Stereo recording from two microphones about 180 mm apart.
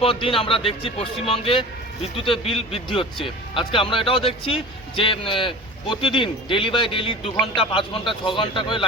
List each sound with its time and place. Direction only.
0.0 s a man's voice: 30° left (ahead or behind)